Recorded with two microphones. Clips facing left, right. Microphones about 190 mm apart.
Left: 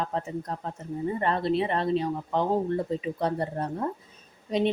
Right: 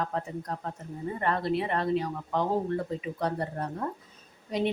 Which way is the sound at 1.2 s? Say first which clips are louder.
Left 2 dB; 25° left (ahead or behind).